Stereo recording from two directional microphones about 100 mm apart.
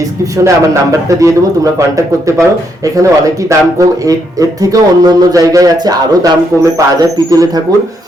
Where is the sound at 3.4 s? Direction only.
35° right (ahead or behind).